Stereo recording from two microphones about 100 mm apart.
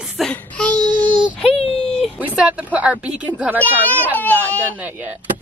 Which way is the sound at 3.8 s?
15° left (ahead or behind).